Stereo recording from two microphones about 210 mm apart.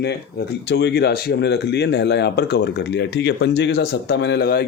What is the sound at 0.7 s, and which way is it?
Speech, 50° left (ahead or behind).